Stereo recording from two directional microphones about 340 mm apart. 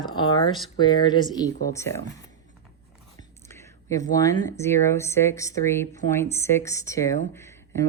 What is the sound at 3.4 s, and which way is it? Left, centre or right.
Speech, centre.